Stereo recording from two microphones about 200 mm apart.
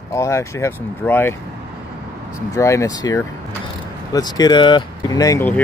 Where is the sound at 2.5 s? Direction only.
15° left (ahead or behind).